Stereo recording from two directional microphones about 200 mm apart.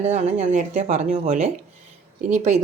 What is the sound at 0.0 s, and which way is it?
Speech, 35° right (ahead or behind).